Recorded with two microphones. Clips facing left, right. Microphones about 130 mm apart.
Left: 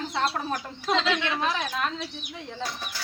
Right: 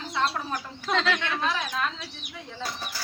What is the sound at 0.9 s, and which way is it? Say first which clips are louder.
Speech: left 1 dB; 15° left (ahead or behind).